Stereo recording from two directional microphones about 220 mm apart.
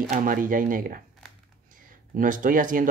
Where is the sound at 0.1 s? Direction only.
35° right (ahead or behind).